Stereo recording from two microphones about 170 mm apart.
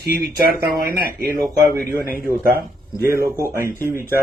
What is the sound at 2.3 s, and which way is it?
Speech, 60° right (ahead or behind).